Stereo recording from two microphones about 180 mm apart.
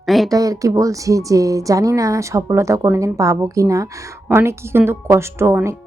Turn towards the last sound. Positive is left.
turn(degrees=-15)  # may be behind; listen again after turning